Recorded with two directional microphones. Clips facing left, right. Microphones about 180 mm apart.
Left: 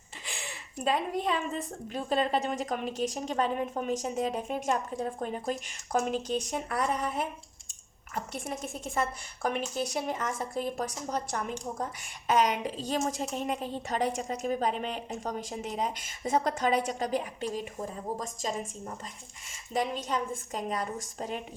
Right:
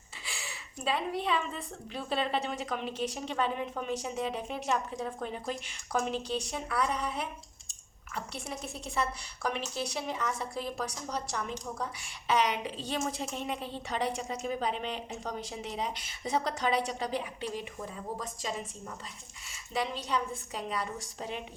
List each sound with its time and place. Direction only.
0.9 s a woman's voice: 45° left (ahead or behind)